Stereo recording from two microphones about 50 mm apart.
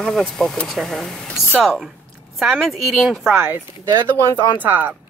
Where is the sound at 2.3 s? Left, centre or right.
Centre.